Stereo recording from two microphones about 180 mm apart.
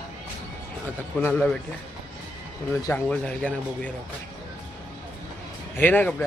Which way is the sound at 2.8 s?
15° left (ahead or behind).